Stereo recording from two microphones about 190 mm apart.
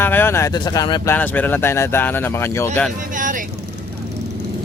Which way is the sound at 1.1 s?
10° left (ahead or behind).